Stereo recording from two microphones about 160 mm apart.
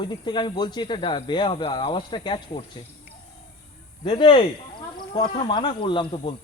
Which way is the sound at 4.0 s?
30° left (ahead or behind).